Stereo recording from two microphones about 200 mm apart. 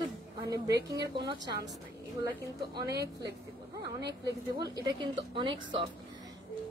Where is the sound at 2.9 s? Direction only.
55° right (ahead or behind).